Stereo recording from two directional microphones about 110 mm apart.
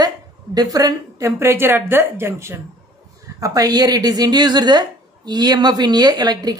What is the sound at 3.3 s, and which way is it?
Speech, 35° right (ahead or behind).